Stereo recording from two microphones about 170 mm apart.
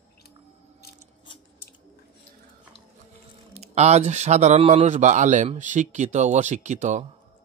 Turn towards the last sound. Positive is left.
turn(degrees=-45)  # may be behind; listen again after turning